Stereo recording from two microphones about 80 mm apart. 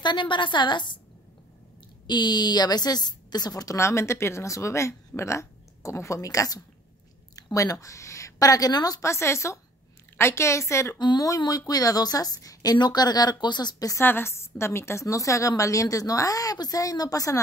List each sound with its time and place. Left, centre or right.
0.0 s a woman's voice: left
2.0 s a woman's voice: left
9.0 s a woman's voice: left
11.0 s a woman's voice: left
11.2 s a woman's voice: left
12.7 s speech: left
13.9 s a woman's voice: left